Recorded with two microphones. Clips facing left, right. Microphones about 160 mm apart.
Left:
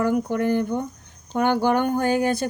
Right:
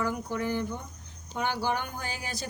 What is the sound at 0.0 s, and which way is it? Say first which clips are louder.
Speech: left 9 dB; 55° left (ahead or behind).